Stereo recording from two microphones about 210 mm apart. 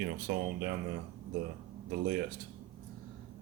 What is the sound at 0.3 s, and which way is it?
Speech, 50° right (ahead or behind).